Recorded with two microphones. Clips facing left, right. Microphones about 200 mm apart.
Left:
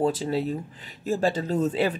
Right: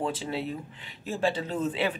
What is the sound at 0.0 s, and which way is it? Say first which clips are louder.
Speech: left 6 dB; 40° left (ahead or behind).